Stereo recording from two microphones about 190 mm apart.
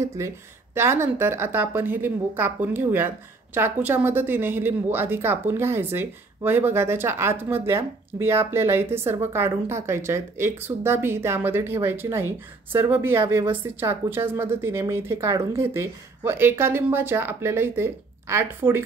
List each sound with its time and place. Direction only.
0.2 s a woman's voice: 15° right (ahead or behind)